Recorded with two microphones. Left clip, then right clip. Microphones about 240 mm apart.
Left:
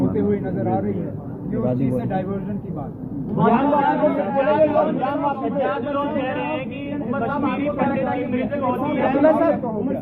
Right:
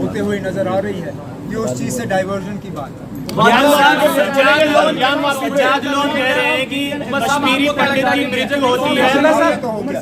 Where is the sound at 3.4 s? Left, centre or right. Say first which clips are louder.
Right 8 dB; right.